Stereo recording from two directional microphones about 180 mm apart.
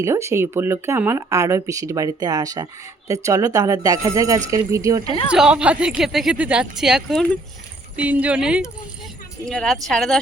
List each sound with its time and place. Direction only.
0.0 s speech: 15° right (ahead or behind)
5.0 s speech: 30° left (ahead or behind)
5.3 s speech: 5° right (ahead or behind)